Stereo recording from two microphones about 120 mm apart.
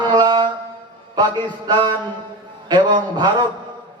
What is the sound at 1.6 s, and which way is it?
A man's voice, 35° right (ahead or behind).